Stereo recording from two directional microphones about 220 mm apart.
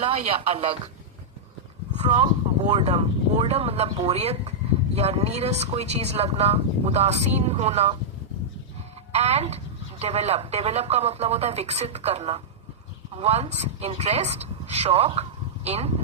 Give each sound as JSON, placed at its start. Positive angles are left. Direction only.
{"t": 0.0, "sound": "speech", "side_deg": -25}
{"t": 2.0, "sound": "speech", "side_deg": -20}
{"t": 9.1, "sound": "speech", "side_deg": -30}